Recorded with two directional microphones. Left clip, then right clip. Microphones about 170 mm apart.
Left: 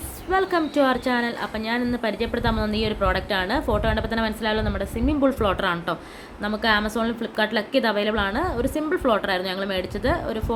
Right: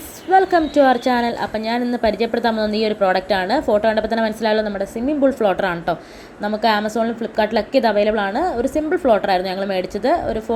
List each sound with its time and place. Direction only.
0.3 s a woman's voice: 15° right (ahead or behind)
4.8 s a woman's voice: 5° right (ahead or behind)